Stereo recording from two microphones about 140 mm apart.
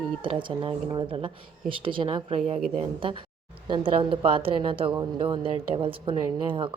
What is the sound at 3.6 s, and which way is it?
Speech, 35° right (ahead or behind).